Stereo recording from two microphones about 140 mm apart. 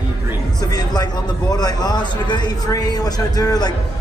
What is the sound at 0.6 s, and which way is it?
A man's voice, 30° left (ahead or behind).